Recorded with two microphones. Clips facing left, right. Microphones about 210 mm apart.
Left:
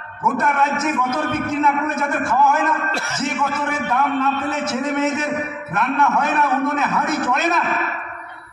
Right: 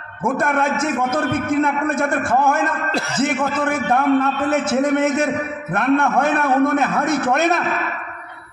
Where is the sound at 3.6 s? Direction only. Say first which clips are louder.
Right 3 dB; 50° right (ahead or behind).